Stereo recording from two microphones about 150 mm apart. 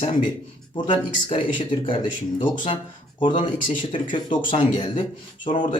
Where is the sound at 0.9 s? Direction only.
35° left (ahead or behind).